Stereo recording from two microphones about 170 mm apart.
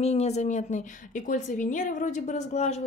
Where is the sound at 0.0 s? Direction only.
40° left (ahead or behind).